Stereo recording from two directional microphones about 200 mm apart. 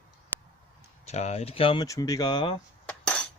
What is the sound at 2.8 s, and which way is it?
Cutlery, 5° left (ahead or behind).